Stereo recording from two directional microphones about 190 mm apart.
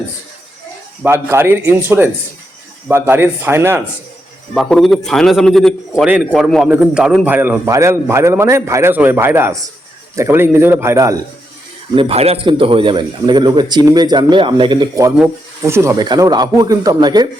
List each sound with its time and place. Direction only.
1.0 s a man's voice: 15° right (ahead or behind)
2.9 s a man's voice: 10° right (ahead or behind)
4.5 s a man's voice: centre (ahead or behind); by 11.2 s 15° right (ahead or behind)
11.9 s a man's voice: 30° right (ahead or behind)